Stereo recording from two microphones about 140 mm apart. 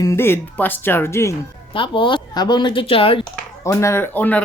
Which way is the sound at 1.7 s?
35° left (ahead or behind).